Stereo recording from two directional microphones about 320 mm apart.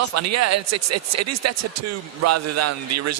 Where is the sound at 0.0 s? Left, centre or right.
Right.